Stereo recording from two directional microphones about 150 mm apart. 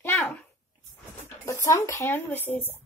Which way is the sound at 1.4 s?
20° left (ahead or behind).